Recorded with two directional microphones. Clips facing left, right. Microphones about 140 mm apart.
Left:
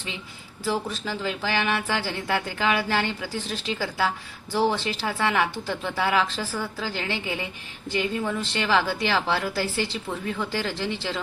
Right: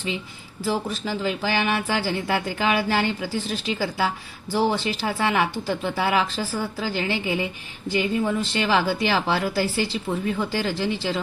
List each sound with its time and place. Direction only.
0.6 s a man's voice: 5° right (ahead or behind)
10.1 s speech: 20° right (ahead or behind)
10.5 s speech: 10° right (ahead or behind)